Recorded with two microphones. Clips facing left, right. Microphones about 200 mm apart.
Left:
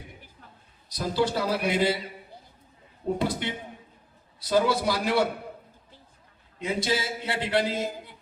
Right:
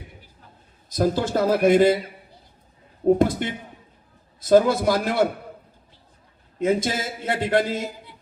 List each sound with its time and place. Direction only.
0.9 s a man's voice: 45° right (ahead or behind)
3.2 s a man's voice: 50° right (ahead or behind)
6.6 s a man's voice: 45° right (ahead or behind)